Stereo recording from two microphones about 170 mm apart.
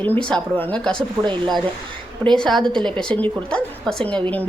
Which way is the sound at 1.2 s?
25° right (ahead or behind).